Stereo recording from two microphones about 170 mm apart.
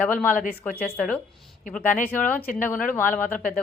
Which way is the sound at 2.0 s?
10° left (ahead or behind).